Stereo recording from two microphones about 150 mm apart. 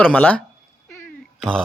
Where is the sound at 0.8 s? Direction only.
10° left (ahead or behind).